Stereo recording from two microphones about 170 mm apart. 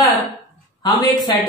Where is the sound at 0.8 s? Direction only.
25° left (ahead or behind).